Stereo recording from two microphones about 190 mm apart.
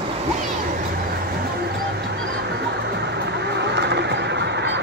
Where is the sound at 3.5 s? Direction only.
65° right (ahead or behind).